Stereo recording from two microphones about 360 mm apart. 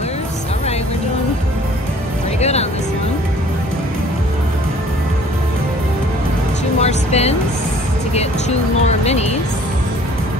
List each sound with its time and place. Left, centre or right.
6.8 s music: centre